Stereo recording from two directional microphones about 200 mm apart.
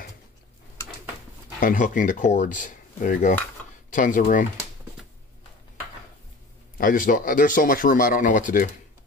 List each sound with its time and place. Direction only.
1.6 s speech: 40° left (ahead or behind)
6.8 s speech: 45° left (ahead or behind)